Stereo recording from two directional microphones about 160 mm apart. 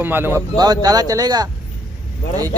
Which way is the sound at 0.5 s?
25° right (ahead or behind).